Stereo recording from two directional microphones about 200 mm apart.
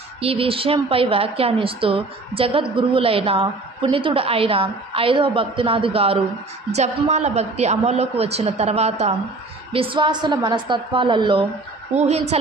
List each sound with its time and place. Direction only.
0.2 s a woman's voice: 30° right (ahead or behind)